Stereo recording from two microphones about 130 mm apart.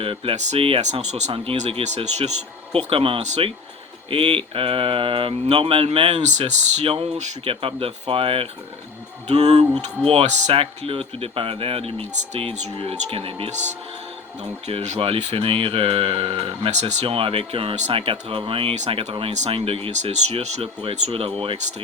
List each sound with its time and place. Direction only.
0.0 s speech: 45° right (ahead or behind)
2.7 s speech: 45° right (ahead or behind)
6.2 s speech: 55° right (ahead or behind)
9.2 s speech: 55° right (ahead or behind)
14.7 s speech: 50° right (ahead or behind)
19.3 s speech: 55° right (ahead or behind)